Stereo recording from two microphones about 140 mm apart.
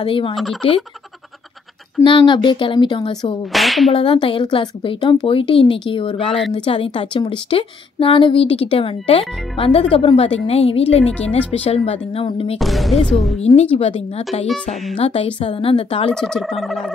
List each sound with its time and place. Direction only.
0.0 s a woman's voice: 40° left (ahead or behind)
0.4 s speech: centre (ahead or behind)
2.0 s a woman's voice: 35° left (ahead or behind)
3.5 s speech: centre (ahead or behind)
3.9 s a woman's voice: 40° left (ahead or behind)
12.5 s speech: centre (ahead or behind)
13.6 s a woman's voice: 50° left (ahead or behind)
16.1 s speech: 5° left (ahead or behind)